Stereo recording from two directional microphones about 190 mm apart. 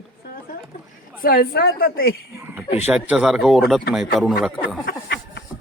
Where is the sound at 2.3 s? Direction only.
15° right (ahead or behind).